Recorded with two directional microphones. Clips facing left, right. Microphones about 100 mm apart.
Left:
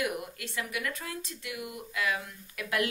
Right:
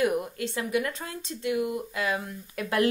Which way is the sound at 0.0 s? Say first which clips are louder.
Right 8 dB; 30° right (ahead or behind).